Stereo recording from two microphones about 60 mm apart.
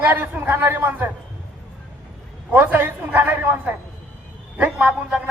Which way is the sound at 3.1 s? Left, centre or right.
Right.